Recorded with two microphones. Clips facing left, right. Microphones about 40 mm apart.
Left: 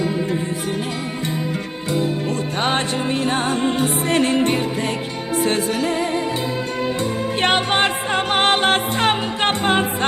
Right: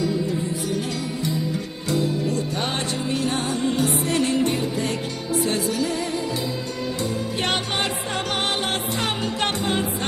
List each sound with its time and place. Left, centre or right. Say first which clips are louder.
2.6 s music: left 5 dB; left
7.4 s music: left 8 dB; left